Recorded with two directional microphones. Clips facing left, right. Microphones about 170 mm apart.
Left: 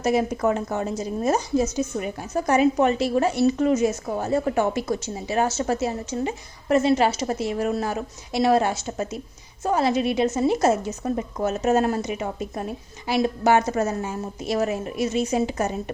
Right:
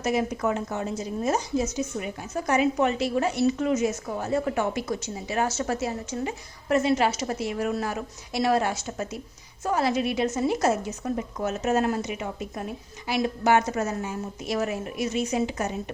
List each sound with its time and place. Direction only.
0.0 s a woman's voice: 35° left (ahead or behind)